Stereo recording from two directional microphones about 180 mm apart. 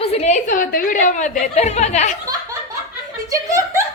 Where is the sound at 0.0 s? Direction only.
35° left (ahead or behind).